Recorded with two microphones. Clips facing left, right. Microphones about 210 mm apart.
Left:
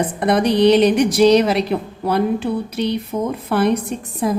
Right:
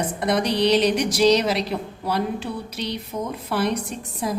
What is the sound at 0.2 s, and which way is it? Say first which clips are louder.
A woman's voice: left 6 dB; 55° left (ahead or behind).